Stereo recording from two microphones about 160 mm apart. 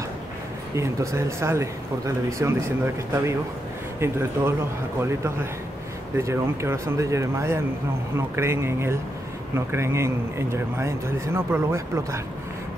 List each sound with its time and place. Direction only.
0.7 s speech: 20° right (ahead or behind)